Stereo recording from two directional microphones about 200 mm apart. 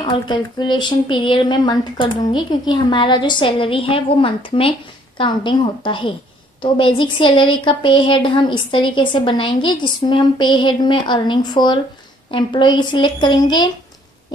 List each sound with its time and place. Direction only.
0.0 s speech: 25° left (ahead or behind)